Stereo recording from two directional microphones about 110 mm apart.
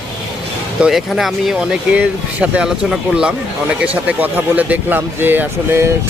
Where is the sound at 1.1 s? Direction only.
Centre (ahead or behind).